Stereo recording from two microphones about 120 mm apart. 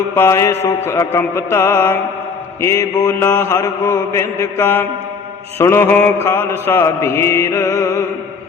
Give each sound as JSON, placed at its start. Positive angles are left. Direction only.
{"t": 0.2, "sound": "mantra", "side_deg": 25}